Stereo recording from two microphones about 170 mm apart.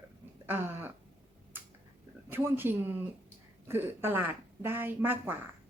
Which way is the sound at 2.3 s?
10° right (ahead or behind).